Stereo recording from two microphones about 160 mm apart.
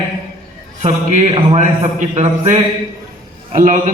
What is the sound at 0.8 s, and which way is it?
A man's voice, 45° right (ahead or behind).